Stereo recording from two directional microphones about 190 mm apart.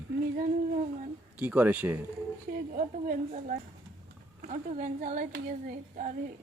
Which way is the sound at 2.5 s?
40° right (ahead or behind).